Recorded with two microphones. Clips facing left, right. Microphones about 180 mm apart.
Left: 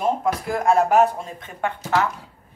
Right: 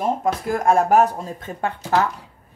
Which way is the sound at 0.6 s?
45° right (ahead or behind).